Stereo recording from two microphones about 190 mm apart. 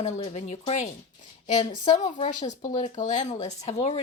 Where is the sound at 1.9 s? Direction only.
40° left (ahead or behind).